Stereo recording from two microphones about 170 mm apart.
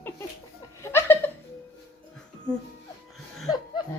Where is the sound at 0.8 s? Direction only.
15° left (ahead or behind).